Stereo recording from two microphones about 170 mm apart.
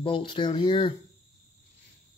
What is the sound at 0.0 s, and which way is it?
Speech, 30° left (ahead or behind).